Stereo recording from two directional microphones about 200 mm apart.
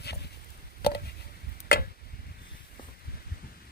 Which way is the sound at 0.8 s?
50° left (ahead or behind).